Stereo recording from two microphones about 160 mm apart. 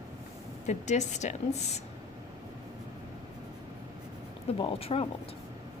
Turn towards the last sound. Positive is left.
turn(degrees=35)  # may be behind; listen again after turning